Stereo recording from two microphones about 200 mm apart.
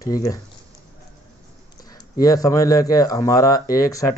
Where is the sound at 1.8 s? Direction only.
20° left (ahead or behind).